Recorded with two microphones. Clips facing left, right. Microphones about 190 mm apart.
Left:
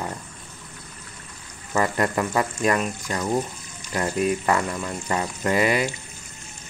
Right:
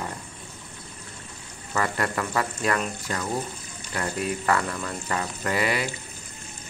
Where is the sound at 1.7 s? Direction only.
20° left (ahead or behind).